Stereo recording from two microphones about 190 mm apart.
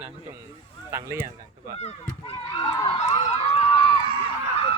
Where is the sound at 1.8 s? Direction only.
30° left (ahead or behind).